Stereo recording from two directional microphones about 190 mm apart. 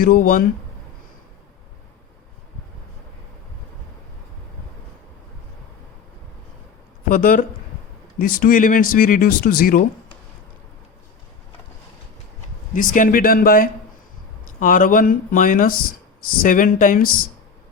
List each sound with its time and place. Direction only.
0.0 s speech: 45° left (ahead or behind)
7.1 s speech: 45° left (ahead or behind)
12.7 s speech: 45° left (ahead or behind)